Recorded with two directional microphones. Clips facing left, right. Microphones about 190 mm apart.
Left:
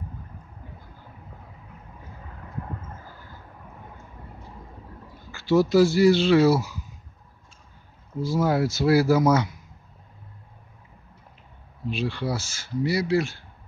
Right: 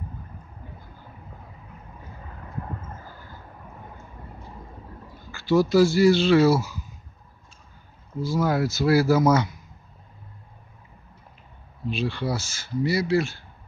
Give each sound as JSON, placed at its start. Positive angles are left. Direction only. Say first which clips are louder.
{"t": 5.3, "sound": "speech", "louder": "even", "side_deg": 25}
{"t": 8.2, "sound": "speech", "louder": "left 1 dB", "side_deg": 30}
{"t": 11.9, "sound": "speech", "louder": "right 1 dB", "side_deg": 10}